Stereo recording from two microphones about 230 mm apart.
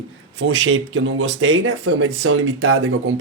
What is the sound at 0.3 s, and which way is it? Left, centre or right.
A man's voice, right.